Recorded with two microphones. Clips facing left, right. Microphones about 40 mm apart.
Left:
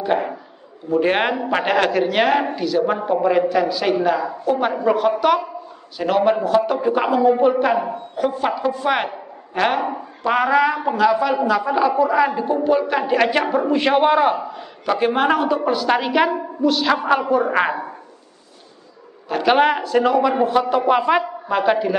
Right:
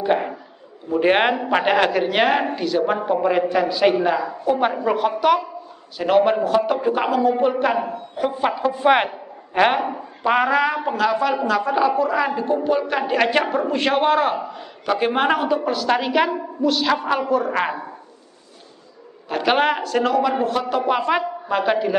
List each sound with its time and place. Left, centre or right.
0.0 s a sound: centre
0.8 s a man's voice: centre
8.7 s a man's voice: centre
9.8 s a woman's voice: centre
19.2 s a man's voice: centre